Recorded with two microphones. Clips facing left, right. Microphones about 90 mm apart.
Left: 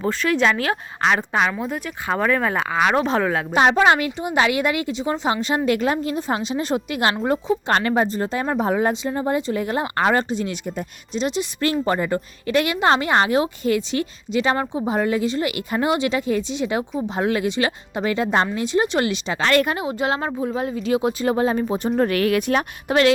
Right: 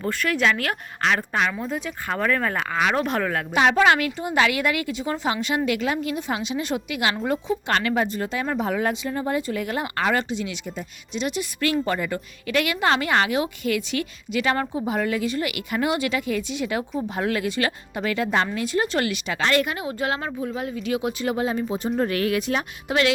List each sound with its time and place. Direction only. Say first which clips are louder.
0.0 s a woman's voice: left 3 dB; 20° left (ahead or behind)
3.5 s a woman's voice: left 2 dB; 30° left (ahead or behind); by 23.1 s 45° left (ahead or behind)